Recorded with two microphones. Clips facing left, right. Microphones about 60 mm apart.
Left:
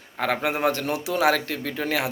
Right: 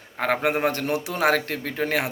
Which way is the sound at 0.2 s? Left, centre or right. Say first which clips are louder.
Right 1 dB; right.